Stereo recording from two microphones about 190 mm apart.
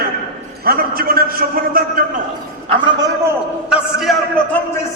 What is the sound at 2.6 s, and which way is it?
Speech, 25° right (ahead or behind).